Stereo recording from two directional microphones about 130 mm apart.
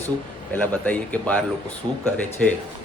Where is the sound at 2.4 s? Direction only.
5° left (ahead or behind).